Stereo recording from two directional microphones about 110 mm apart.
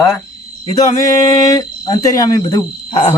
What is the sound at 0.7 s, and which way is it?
Speech, 30° left (ahead or behind).